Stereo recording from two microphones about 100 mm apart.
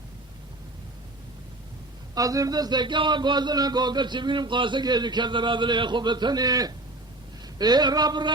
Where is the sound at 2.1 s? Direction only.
35° right (ahead or behind).